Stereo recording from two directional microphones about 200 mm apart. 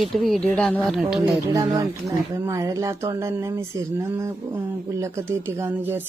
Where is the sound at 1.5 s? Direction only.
20° right (ahead or behind).